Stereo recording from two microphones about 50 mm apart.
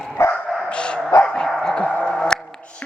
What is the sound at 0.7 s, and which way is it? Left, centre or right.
Dog, left.